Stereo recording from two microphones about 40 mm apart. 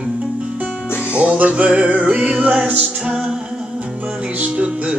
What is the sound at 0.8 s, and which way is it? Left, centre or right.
Music, left.